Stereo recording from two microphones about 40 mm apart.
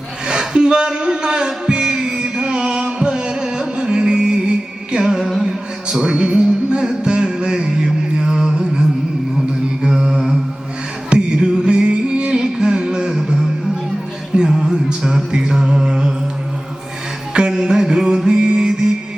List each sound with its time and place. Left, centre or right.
0.3 s music: right
9.8 s mantra: centre
11.1 s music: right
17.3 s music: centre